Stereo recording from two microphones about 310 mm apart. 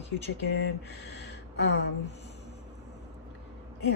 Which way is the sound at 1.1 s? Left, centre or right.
Left.